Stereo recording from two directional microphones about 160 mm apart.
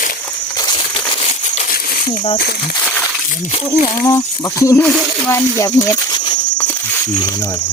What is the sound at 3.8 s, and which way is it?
Speech, 20° left (ahead or behind).